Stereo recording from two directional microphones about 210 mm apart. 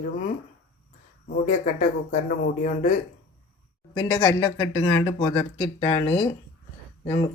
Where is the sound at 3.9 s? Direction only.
20° left (ahead or behind).